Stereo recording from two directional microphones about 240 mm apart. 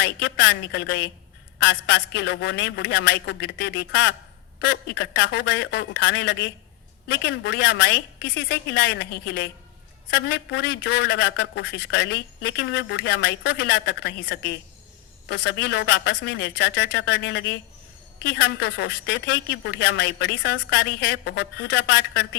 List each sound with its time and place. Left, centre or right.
0.0 s speech: left
10.8 s speech: left